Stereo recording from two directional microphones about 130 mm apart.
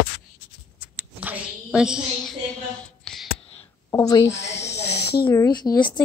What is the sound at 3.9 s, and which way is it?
Speech, 25° left (ahead or behind).